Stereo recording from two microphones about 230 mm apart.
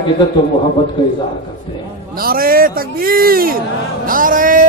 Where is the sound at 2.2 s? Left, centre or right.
Right.